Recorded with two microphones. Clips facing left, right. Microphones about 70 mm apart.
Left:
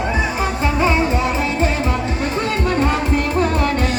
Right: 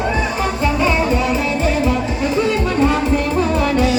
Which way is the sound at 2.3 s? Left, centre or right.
Left.